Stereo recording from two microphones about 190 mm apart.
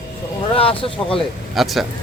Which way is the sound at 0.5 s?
30° left (ahead or behind).